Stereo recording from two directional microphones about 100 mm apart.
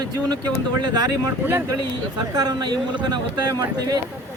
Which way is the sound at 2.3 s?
40° right (ahead or behind).